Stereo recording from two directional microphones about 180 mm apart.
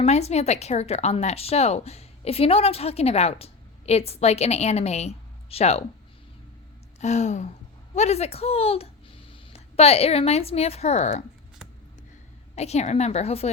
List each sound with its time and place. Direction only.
0.0 s a woman's voice: 35° left (ahead or behind)
7.0 s a woman's voice: 40° left (ahead or behind)
12.5 s a woman's voice: 35° left (ahead or behind)